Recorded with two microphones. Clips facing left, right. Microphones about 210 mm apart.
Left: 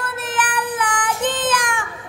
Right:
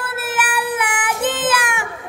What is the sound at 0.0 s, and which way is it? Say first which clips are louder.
Child singing: right 1 dB; 10° right (ahead or behind).